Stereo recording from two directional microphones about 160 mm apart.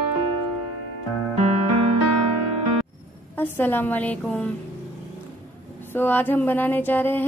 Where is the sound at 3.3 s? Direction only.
10° left (ahead or behind).